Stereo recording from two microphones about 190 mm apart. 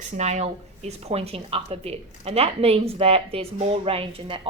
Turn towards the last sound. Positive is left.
turn(degrees=-30)  # may be behind; listen again after turning